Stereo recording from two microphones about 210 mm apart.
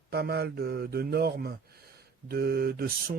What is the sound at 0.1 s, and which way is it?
Speech, 50° right (ahead or behind).